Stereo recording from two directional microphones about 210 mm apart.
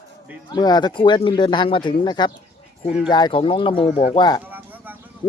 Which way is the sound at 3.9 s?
40° left (ahead or behind).